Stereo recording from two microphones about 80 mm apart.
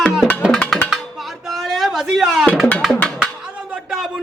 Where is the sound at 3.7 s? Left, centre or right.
Centre.